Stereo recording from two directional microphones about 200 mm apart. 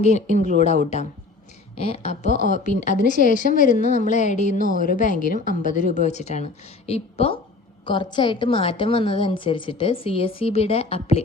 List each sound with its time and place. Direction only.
0.0 s a woman's voice: 35° left (ahead or behind)